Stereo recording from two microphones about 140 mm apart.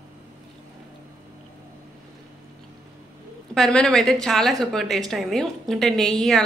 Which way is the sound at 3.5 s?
Centre (ahead or behind).